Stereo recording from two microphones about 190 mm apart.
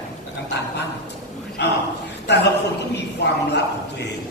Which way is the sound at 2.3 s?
65° left (ahead or behind).